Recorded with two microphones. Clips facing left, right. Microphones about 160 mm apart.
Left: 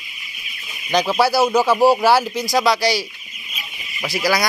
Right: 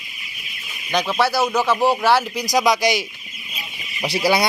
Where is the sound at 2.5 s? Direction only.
15° right (ahead or behind).